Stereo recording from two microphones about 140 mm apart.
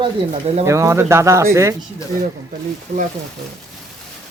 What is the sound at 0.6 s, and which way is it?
Speech, 20° right (ahead or behind).